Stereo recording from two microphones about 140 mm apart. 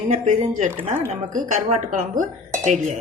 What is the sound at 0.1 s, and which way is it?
A woman's voice, 60° right (ahead or behind).